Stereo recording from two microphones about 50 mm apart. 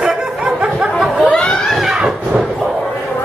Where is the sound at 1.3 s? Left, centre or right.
Left.